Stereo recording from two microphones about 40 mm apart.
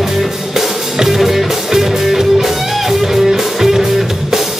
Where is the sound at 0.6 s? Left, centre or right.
Centre.